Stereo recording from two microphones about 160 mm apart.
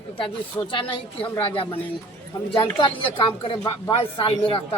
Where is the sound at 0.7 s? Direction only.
30° left (ahead or behind).